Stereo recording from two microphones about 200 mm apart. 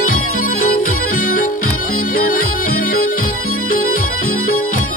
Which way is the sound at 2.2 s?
45° left (ahead or behind).